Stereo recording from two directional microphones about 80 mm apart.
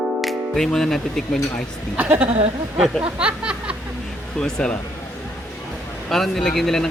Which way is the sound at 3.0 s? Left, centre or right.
Centre.